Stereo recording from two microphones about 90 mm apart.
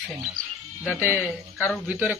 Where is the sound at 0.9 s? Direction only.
25° right (ahead or behind).